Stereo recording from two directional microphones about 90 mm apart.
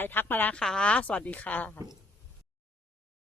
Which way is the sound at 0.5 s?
10° left (ahead or behind).